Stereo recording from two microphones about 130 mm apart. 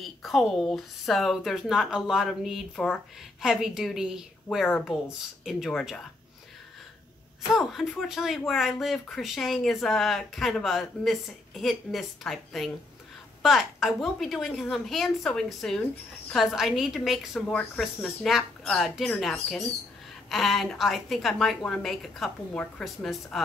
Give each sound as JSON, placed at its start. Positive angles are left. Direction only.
{"t": 0.0, "sound": "a woman's voice", "side_deg": 0}
{"t": 7.5, "sound": "a woman's voice", "side_deg": 0}